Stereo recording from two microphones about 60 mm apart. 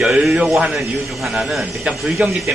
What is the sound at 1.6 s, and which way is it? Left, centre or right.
Speech, right.